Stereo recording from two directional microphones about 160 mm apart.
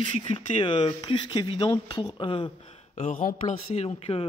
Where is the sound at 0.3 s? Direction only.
30° left (ahead or behind).